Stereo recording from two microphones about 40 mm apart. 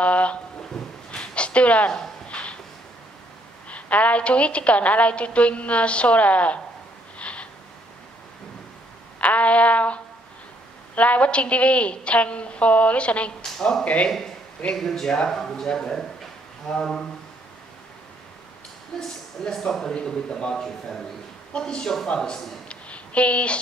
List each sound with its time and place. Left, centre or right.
0.0 s a sound: left
0.8 s a sound: centre
1.1 s a sound: left
3.6 s a woman's voice: left
7.2 s snort: left
9.2 s a sound: left
11.0 s a woman's voice: left
13.6 s speech: centre
18.9 s speech: centre
19.9 s a man's voice: left
20.5 s a man's voice: centre
21.5 s a man's voice: left
21.8 s speech: centre
22.1 s a woman's voice: left